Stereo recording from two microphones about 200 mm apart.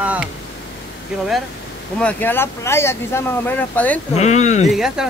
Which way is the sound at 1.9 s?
10° left (ahead or behind).